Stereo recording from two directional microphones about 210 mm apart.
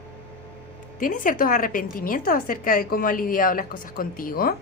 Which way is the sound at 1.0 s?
40° left (ahead or behind).